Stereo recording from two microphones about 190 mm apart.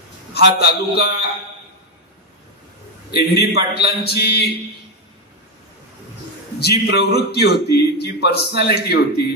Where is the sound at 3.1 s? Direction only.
55° left (ahead or behind).